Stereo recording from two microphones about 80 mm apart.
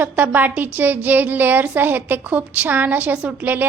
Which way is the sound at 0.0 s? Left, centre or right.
Right.